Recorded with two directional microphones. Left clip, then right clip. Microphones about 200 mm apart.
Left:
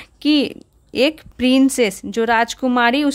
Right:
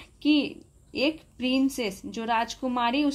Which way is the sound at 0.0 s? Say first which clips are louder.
Left 7 dB; 40° left (ahead or behind).